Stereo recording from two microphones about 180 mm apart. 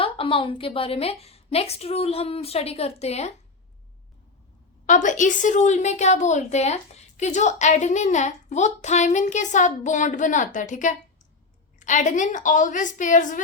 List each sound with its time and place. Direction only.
0.0 s a woman's voice: 30° left (ahead or behind)
4.9 s a woman's voice: 45° left (ahead or behind)